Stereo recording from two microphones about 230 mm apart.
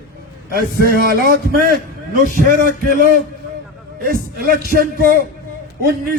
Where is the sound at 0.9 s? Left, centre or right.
Right.